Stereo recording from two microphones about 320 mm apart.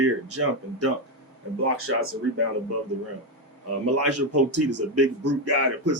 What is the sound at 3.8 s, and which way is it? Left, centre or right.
A man's voice, right.